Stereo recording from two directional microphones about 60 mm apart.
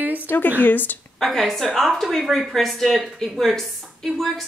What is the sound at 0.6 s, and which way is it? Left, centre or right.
Speech, left.